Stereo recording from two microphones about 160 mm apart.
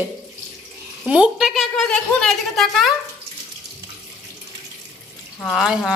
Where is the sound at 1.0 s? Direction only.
5° right (ahead or behind).